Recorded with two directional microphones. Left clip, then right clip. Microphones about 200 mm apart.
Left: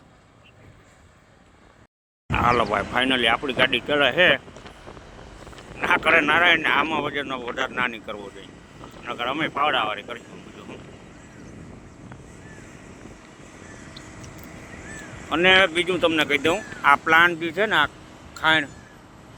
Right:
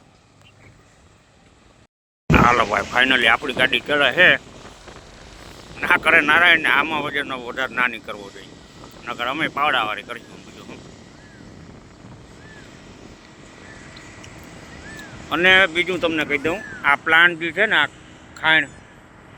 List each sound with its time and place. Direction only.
2.3 s speech: centre (ahead or behind)
5.8 s speech: 5° left (ahead or behind)
13.7 s vehicle: 60° left (ahead or behind)
14.8 s a sound: 40° left (ahead or behind)
15.3 s speech: 5° left (ahead or behind)